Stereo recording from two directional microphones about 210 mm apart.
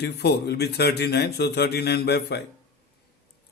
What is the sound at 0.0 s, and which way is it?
A man's voice, 50° left (ahead or behind).